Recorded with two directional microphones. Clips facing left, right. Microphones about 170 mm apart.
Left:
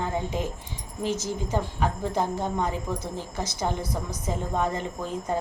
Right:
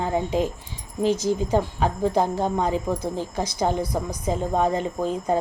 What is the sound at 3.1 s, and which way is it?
A woman's voice, 15° right (ahead or behind).